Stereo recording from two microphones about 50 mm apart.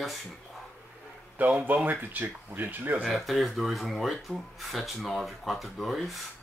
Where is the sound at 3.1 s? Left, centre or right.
Centre.